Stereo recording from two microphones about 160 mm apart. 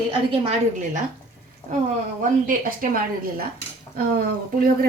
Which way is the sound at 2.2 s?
55° right (ahead or behind).